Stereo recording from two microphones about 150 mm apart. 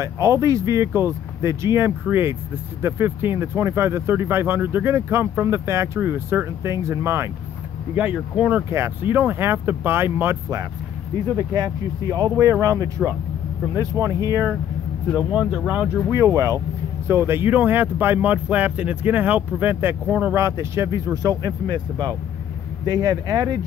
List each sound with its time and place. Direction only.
0.0 s speech: 20° right (ahead or behind)
15.1 s speech: 5° right (ahead or behind)
16.1 s speech: 20° right (ahead or behind)